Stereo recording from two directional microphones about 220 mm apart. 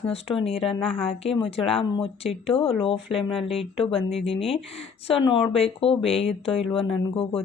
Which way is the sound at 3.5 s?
25° left (ahead or behind).